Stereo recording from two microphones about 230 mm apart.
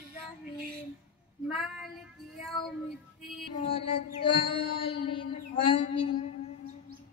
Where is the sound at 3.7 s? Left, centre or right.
Left.